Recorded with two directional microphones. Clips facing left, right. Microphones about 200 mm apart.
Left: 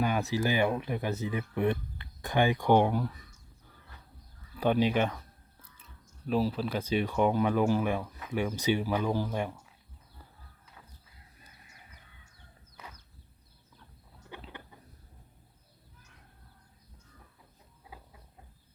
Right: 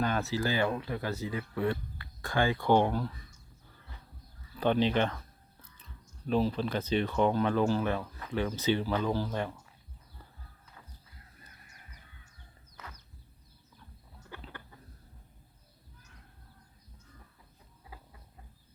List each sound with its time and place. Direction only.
0.0 s speech: 15° left (ahead or behind)
4.5 s speech: 10° left (ahead or behind)
6.2 s speech: 5° left (ahead or behind)
12.7 s a sound: 10° left (ahead or behind)